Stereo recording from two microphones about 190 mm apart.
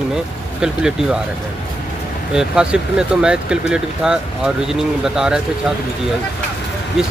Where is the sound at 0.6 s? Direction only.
5° right (ahead or behind).